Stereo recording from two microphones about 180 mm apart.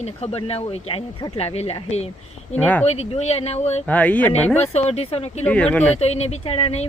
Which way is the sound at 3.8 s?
10° left (ahead or behind).